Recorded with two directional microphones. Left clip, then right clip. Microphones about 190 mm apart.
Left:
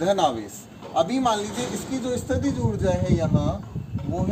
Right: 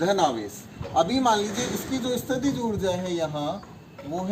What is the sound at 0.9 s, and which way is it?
A man's voice, 10° left (ahead or behind).